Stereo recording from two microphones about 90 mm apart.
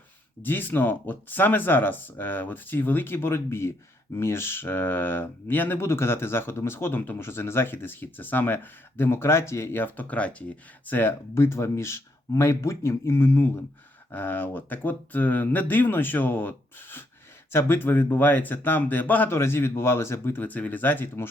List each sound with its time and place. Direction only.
0.4 s speech: 20° left (ahead or behind)